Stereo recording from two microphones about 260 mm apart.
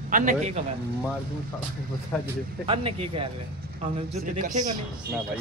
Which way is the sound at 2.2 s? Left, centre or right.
Centre.